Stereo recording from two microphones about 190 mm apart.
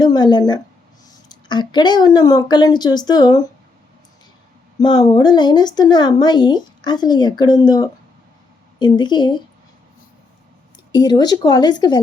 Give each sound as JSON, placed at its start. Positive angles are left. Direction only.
{"t": 0.0, "sound": "a woman's voice", "side_deg": 20}
{"t": 4.8, "sound": "speech", "side_deg": 20}
{"t": 10.9, "sound": "speech", "side_deg": 20}